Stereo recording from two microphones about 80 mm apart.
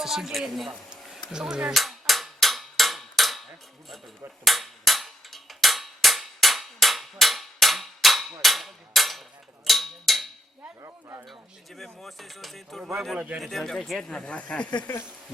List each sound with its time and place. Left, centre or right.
0.0 s speech: centre
0.7 s a sound: centre
4.4 s a sound: centre
10.8 s speech: right
11.3 s speech: centre
13.1 s speech: centre
13.4 s speech: centre